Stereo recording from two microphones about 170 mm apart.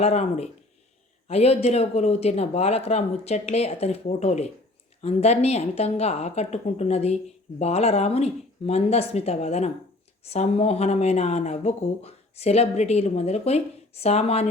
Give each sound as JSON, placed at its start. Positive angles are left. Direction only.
{"t": 0.0, "sound": "a woman's voice", "side_deg": 40}